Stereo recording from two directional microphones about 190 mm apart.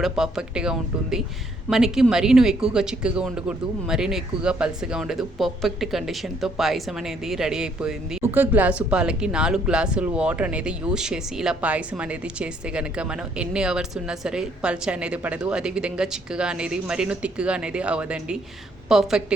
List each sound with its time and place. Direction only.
0.0 s speech: centre (ahead or behind)